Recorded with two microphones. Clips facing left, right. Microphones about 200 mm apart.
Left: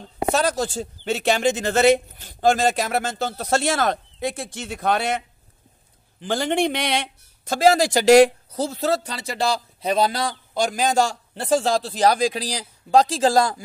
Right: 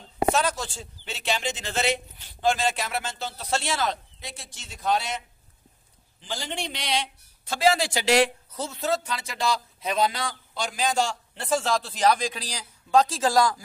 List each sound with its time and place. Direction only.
0.3 s speech: 40° left (ahead or behind); by 5.2 s 60° left (ahead or behind)
6.2 s speech: 55° left (ahead or behind); by 13.6 s 30° left (ahead or behind)